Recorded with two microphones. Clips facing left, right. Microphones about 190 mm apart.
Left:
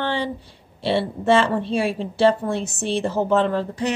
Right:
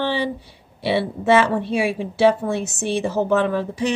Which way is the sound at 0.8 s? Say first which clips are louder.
Right 1 dB; 15° right (ahead or behind).